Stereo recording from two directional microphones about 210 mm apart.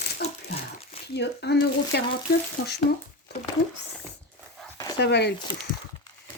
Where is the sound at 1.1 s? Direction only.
55° left (ahead or behind).